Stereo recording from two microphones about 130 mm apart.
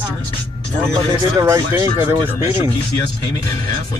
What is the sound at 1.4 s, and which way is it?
Speech, 25° right (ahead or behind).